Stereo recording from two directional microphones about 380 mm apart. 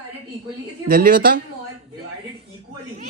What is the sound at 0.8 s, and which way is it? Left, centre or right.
Speech, right.